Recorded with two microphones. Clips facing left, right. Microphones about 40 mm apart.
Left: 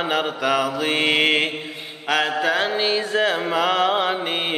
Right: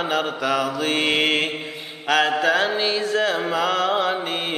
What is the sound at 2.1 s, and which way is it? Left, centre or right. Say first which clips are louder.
Mantra: right 2 dB; centre.